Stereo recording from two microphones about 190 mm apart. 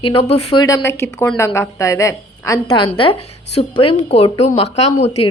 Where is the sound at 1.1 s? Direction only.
5° left (ahead or behind).